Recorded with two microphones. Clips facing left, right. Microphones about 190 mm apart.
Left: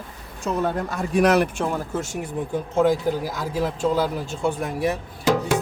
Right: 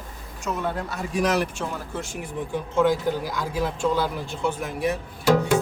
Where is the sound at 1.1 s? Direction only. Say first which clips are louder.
Left 5 dB; 60° left (ahead or behind).